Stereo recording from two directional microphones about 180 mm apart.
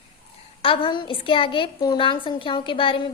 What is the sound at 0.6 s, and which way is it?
Speech, 30° left (ahead or behind).